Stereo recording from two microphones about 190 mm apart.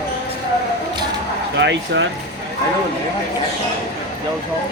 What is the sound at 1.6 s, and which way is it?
Speech, 70° right (ahead or behind).